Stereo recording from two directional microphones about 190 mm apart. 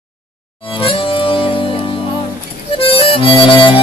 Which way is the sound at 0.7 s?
30° left (ahead or behind).